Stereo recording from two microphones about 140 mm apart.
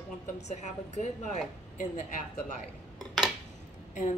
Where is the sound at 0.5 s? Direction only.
60° left (ahead or behind).